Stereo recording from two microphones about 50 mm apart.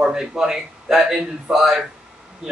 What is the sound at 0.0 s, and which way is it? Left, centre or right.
Speech, centre.